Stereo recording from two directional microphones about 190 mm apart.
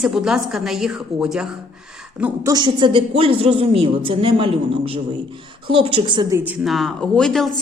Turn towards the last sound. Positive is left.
turn(degrees=0)  # may be behind; listen again after turning